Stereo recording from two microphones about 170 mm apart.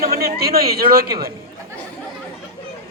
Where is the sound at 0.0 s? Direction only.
65° right (ahead or behind).